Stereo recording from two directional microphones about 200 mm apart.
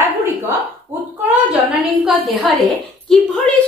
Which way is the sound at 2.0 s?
Centre (ahead or behind).